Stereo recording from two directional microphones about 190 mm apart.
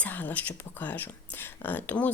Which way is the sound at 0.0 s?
10° left (ahead or behind).